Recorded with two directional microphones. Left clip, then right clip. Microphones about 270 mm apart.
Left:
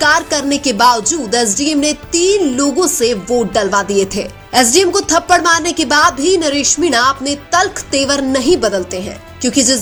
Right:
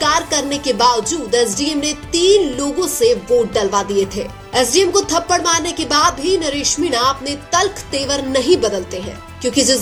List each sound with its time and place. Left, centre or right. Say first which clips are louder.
0.0 s music: left 4 dB; left
4.1 s speech: left 5 dB; left
4.9 s music: left 4 dB; left